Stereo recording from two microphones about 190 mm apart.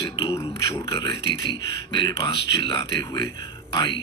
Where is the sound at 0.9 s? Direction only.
25° left (ahead or behind).